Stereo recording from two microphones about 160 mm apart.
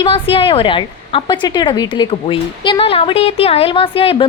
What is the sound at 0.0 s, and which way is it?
A woman's voice, 35° left (ahead or behind).